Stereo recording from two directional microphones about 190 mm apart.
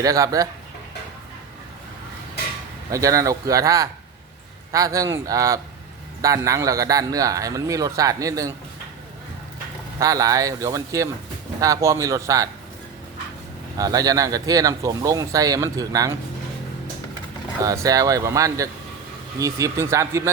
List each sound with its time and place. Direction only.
0.0 s a man's voice: 20° right (ahead or behind)
2.9 s a man's voice: 15° right (ahead or behind)
10.0 s a man's voice: 20° right (ahead or behind)
13.7 s speech: 20° right (ahead or behind)
17.6 s a man's voice: 20° right (ahead or behind)